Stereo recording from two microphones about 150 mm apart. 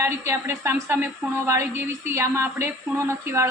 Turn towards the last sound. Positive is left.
turn(degrees=-20)  # may be behind; listen again after turning